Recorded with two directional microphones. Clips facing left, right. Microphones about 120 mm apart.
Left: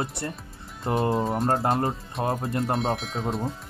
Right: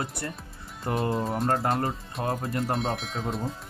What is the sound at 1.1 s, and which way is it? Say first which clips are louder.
Speech: left 2 dB; centre (ahead or behind).